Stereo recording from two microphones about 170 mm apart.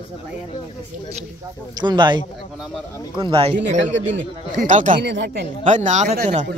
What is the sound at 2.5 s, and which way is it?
Speech, 5° right (ahead or behind).